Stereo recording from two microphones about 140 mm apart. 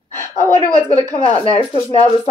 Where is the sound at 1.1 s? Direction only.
45° left (ahead or behind).